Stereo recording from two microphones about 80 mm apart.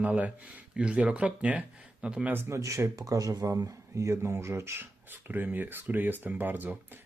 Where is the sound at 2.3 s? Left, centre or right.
Right.